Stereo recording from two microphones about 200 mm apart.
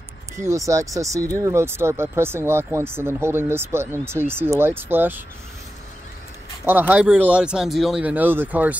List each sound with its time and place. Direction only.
0.4 s speech: 15° right (ahead or behind)
6.6 s speech: 10° right (ahead or behind)